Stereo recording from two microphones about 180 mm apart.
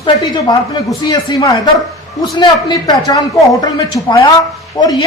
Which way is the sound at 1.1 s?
25° left (ahead or behind).